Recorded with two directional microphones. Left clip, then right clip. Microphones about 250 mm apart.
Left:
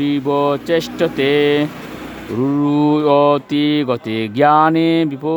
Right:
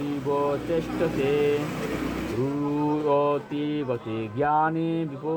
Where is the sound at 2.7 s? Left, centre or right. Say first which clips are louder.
Left 10 dB; left.